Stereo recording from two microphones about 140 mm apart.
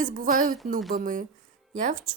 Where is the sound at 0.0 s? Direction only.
75° right (ahead or behind).